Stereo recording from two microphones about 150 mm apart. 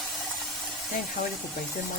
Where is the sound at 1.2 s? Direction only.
60° left (ahead or behind).